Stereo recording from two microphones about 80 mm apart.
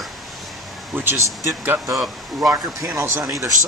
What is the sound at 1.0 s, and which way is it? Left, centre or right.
Speech, right.